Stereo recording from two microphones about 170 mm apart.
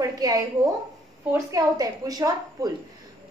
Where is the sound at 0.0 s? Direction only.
20° right (ahead or behind).